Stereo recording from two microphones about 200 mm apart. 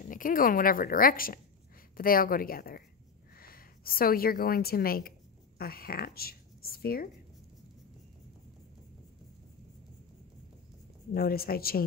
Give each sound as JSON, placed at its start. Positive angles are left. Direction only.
{"t": 0.1, "sound": "a woman's voice", "side_deg": 45}
{"t": 11.1, "sound": "a woman's voice", "side_deg": 50}